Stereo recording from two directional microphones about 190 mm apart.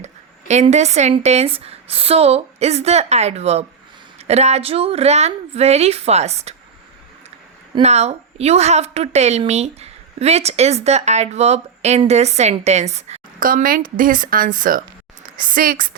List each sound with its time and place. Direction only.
0.0 s a woman's voice: 35° right (ahead or behind)
7.8 s a woman's voice: 35° right (ahead or behind)